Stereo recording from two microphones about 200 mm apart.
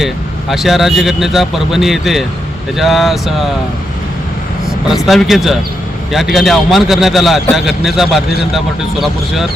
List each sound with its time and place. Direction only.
0.5 s a man's voice: centre (ahead or behind)
4.9 s a man's voice: centre (ahead or behind)